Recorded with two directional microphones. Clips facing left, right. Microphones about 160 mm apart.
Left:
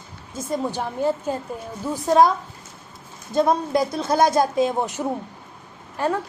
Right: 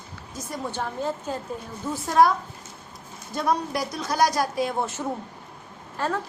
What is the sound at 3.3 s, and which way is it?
A woman's voice, 25° left (ahead or behind).